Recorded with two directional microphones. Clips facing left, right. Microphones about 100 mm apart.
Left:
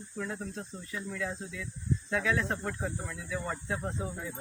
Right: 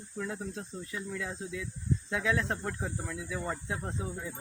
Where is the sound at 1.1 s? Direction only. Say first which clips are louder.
Left 1 dB; 20° right (ahead or behind).